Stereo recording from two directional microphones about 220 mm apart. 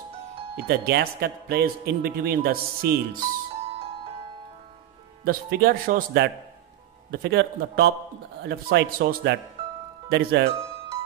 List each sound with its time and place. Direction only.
0.6 s a man's voice: 45° right (ahead or behind)
5.2 s a man's voice: 45° right (ahead or behind)